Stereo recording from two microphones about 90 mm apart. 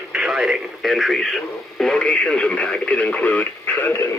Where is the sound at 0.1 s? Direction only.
5° right (ahead or behind); by 4.0 s 20° left (ahead or behind).